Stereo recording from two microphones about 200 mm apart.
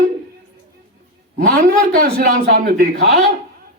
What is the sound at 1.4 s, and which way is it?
Speech, 45° right (ahead or behind).